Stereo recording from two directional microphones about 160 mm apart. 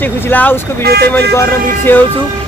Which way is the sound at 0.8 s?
85° right.